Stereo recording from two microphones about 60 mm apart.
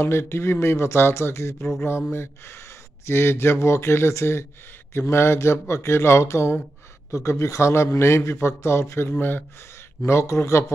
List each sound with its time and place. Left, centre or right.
0.0 s a man's voice: left
9.1 s speech: left
10.0 s a man's voice: left